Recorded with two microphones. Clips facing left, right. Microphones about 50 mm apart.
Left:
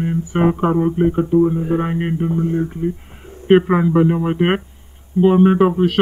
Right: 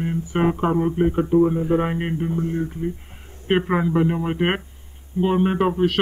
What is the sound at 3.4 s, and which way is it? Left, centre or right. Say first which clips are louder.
Speech: left 7 dB; centre.